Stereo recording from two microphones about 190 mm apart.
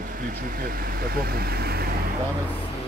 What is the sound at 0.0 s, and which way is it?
Speech, 45° right (ahead or behind).